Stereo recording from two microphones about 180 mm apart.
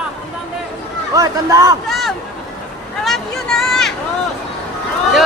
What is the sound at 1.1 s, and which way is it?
Speech, 20° right (ahead or behind).